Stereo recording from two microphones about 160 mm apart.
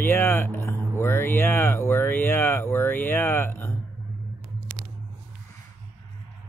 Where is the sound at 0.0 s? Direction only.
15° left (ahead or behind).